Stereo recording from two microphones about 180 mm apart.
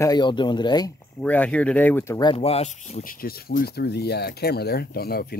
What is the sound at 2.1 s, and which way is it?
Speech, 30° left (ahead or behind).